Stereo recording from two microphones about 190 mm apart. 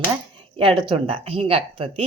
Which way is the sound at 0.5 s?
25° right (ahead or behind).